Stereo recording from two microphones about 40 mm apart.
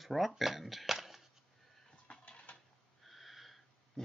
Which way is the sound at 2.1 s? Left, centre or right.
Left.